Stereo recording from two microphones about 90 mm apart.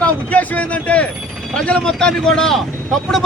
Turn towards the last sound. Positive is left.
turn(degrees=0)  # may be behind; listen again after turning